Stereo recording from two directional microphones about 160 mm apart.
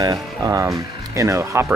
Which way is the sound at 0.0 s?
25° right (ahead or behind).